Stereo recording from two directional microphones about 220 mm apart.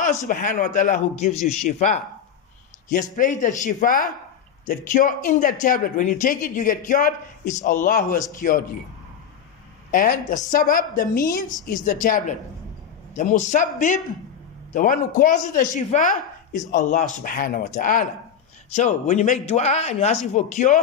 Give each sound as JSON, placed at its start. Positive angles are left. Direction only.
{"t": 0.0, "sound": "speech", "side_deg": 35}
{"t": 9.8, "sound": "a man's voice", "side_deg": 40}